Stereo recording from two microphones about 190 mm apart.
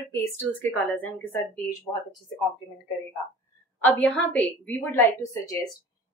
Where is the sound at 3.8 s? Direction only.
5° left (ahead or behind).